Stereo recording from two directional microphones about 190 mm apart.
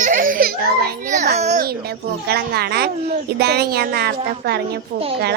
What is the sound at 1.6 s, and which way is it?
Speech, 55° right (ahead or behind).